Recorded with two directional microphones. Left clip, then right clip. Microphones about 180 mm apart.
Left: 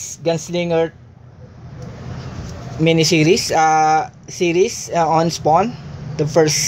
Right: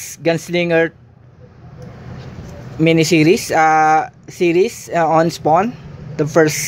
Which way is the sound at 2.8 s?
30° right (ahead or behind).